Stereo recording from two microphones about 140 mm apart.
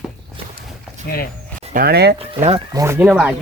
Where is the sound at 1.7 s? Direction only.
90° right.